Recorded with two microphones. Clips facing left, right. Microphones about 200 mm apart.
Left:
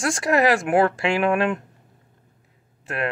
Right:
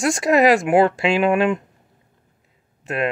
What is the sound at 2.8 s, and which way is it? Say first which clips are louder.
Speech: right 4 dB; 20° right (ahead or behind).